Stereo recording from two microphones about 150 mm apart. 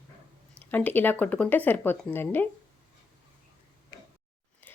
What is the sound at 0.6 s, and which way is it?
Speech, 10° left (ahead or behind).